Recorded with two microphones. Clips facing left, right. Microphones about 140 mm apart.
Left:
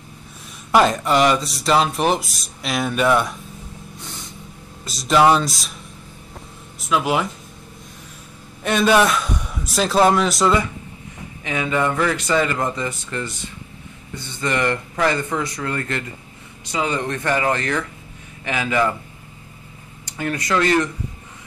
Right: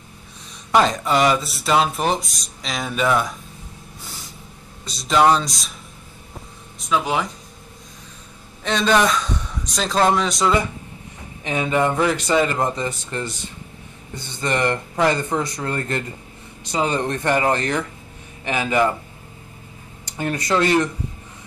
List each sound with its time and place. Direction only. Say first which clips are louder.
0.7 s speech: left 1 dB; 5° left (ahead or behind)
4.8 s speech: left 1 dB; centre (ahead or behind)
6.8 s speech: left 1 dB; 5° left (ahead or behind)
8.6 s a man's voice: left 2 dB; 10° left (ahead or behind)
11.4 s speech: right 1 dB; 25° right (ahead or behind)
14.4 s speech: even; 25° right (ahead or behind)
20.2 s speech: right 1 dB; 30° right (ahead or behind)